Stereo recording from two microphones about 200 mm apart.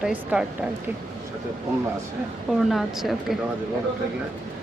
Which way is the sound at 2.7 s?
Centre (ahead or behind).